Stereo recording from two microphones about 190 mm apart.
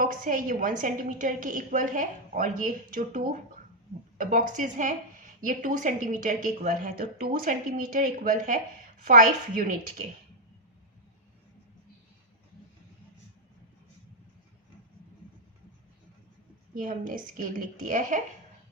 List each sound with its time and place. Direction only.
0.0 s a woman's voice: 45° right (ahead or behind)
16.7 s a woman's voice: 45° right (ahead or behind)